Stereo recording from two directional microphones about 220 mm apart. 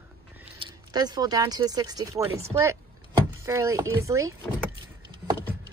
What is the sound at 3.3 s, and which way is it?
Speech, 15° right (ahead or behind).